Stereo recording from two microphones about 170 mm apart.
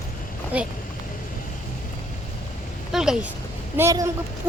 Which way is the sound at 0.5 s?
5° right (ahead or behind).